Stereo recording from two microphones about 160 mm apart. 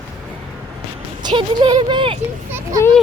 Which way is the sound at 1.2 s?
25° right (ahead or behind).